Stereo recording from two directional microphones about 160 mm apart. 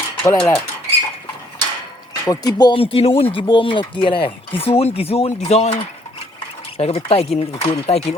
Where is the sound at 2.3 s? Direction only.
25° left (ahead or behind); by 5.8 s 45° left (ahead or behind).